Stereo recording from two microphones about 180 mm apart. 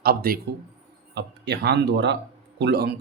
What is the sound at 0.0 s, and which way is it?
Speech, 55° right (ahead or behind).